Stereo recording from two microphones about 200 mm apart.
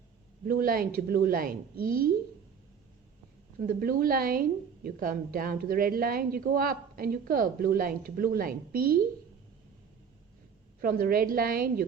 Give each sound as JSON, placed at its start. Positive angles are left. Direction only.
{"t": 0.4, "sound": "a woman's voice", "side_deg": -45}
{"t": 3.6, "sound": "a woman's voice", "side_deg": -45}
{"t": 10.8, "sound": "a woman's voice", "side_deg": -45}